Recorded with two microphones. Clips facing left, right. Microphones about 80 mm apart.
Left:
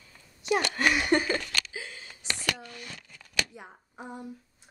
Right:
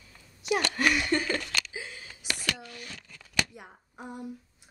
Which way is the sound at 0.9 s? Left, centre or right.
Left.